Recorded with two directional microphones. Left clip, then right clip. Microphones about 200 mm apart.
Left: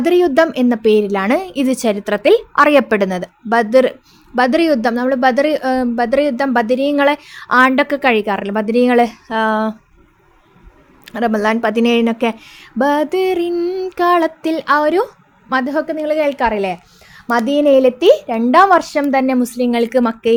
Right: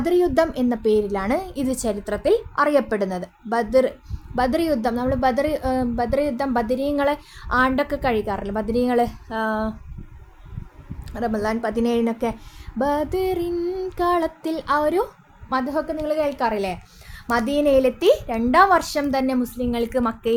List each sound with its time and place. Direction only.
0.0 s a woman's voice: 15° left (ahead or behind)
11.1 s a woman's voice: 20° left (ahead or behind)